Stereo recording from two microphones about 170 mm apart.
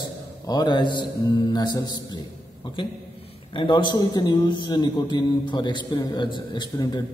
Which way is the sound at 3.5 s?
30° left (ahead or behind).